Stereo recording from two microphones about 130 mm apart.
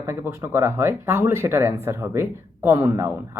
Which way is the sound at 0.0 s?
20° right (ahead or behind).